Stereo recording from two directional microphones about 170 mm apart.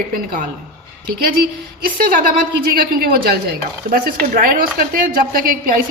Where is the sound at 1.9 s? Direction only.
55° right (ahead or behind).